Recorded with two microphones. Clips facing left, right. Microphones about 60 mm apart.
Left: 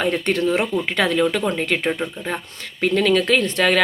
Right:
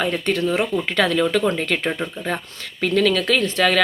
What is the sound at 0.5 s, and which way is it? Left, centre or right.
Speech, left.